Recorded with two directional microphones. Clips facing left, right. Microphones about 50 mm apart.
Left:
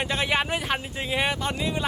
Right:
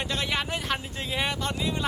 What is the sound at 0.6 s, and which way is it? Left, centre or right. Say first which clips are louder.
Speech: left 2 dB; centre.